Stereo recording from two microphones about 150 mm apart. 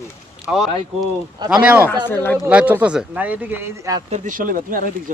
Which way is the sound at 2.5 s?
10° right (ahead or behind).